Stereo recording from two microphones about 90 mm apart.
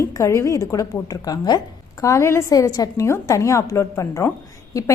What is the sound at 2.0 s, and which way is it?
A woman's voice, 35° left (ahead or behind).